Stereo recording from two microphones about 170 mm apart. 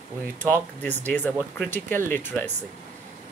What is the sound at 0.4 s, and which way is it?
Speech, 10° left (ahead or behind).